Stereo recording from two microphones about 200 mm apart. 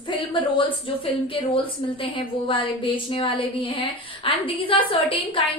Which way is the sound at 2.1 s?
25° left (ahead or behind).